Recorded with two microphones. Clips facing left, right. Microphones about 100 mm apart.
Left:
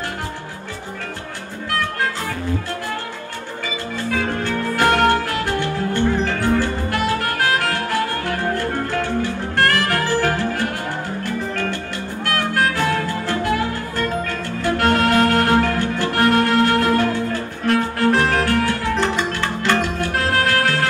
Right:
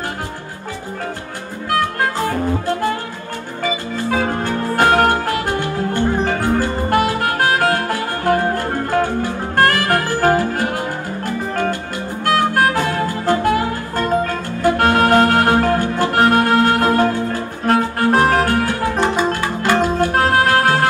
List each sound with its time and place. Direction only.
3.9 s music: 35° right (ahead or behind)
12.5 s music: 45° right (ahead or behind)